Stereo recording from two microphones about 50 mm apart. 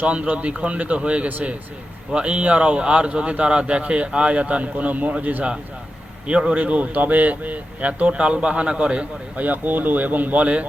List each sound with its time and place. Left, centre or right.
0.0 s speech: right